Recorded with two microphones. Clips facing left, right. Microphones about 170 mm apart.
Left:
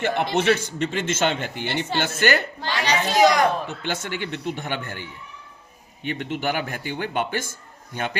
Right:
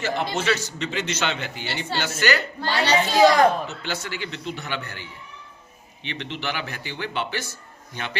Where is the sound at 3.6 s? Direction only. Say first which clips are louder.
Left 2 dB; 50° left (ahead or behind).